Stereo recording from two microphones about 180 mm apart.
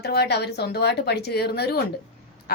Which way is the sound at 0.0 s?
65° left (ahead or behind).